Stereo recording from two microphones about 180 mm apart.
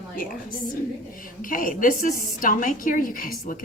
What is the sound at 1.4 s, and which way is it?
A woman's voice, 50° left (ahead or behind).